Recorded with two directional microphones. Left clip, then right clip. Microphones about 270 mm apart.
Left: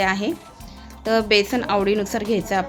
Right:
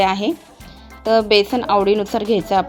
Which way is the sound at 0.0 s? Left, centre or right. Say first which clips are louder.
Right 4 dB; centre.